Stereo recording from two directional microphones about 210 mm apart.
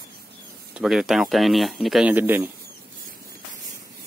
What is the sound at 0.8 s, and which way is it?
Speech, 5° right (ahead or behind).